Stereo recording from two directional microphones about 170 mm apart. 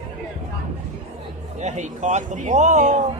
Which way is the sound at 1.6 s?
45° right (ahead or behind).